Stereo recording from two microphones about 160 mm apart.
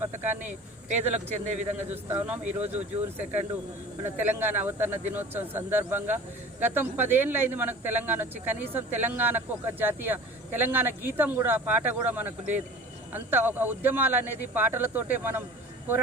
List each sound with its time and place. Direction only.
0.0 s speech: 10° right (ahead or behind)
0.3 s speech: 50° right (ahead or behind)
2.0 s speech: 10° right (ahead or behind)